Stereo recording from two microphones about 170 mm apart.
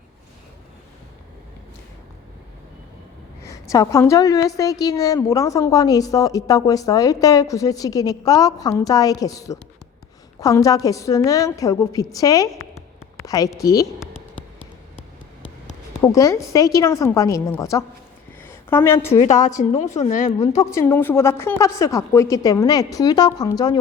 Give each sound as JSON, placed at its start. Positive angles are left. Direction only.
{"t": 3.5, "sound": "a woman's voice", "side_deg": 20}
{"t": 12.5, "sound": "a sound", "side_deg": 15}
{"t": 16.0, "sound": "a woman's voice", "side_deg": 20}
{"t": 19.2, "sound": "a woman's voice", "side_deg": 45}
{"t": 20.7, "sound": "a woman's voice", "side_deg": 15}